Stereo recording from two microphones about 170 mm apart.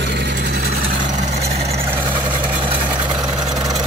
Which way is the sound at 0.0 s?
85° right.